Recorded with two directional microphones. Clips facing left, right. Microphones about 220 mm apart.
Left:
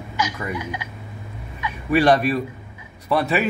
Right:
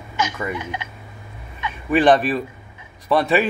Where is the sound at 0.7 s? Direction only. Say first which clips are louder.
Right 1 dB; 25° right (ahead or behind).